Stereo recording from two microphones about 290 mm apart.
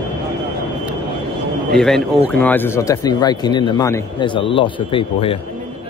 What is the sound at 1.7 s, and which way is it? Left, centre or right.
Speech, centre.